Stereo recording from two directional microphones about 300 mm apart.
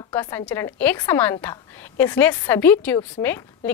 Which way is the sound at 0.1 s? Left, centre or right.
Centre.